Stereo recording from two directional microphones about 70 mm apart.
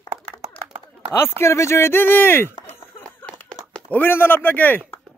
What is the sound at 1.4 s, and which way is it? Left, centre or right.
Speech, left.